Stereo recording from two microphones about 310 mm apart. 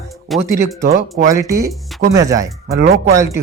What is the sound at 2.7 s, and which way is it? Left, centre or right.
Speech, right.